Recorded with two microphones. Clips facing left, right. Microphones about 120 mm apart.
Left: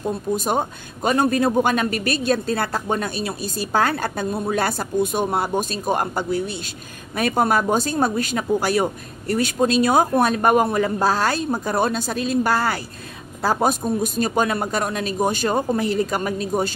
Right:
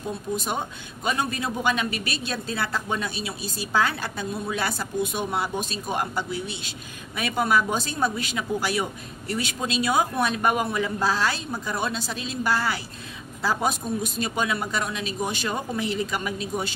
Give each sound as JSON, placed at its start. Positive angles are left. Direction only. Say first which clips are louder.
{"t": 0.4, "sound": "a man's voice", "louder": "left 7 dB", "side_deg": 45}